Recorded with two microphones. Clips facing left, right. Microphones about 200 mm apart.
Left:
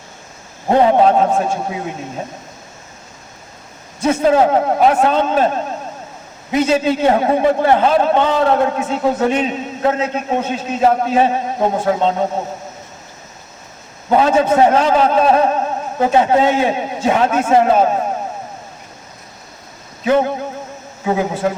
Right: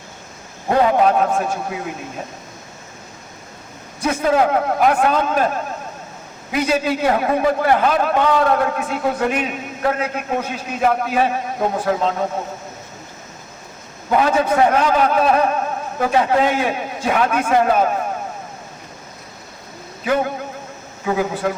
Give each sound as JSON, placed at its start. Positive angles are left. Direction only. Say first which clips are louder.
{"t": 0.7, "sound": "a man's voice", "louder": "left 3 dB", "side_deg": 30}
{"t": 4.0, "sound": "a man's voice", "louder": "left 4 dB", "side_deg": 30}
{"t": 14.1, "sound": "a man's voice", "louder": "left 3 dB", "side_deg": 25}
{"t": 20.1, "sound": "a man's voice", "louder": "left 5 dB", "side_deg": 25}